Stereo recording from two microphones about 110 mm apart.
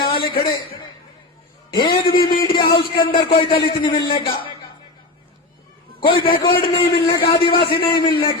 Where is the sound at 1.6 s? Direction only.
45° left (ahead or behind).